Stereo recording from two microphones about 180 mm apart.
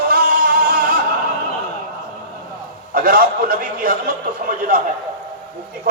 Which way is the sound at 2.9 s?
55° right (ahead or behind).